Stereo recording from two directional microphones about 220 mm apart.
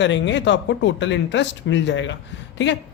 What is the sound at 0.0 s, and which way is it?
A man's voice, 55° left (ahead or behind).